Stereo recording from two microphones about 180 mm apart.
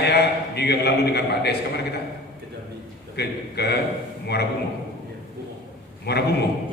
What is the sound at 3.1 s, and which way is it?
Speech, 65° left (ahead or behind).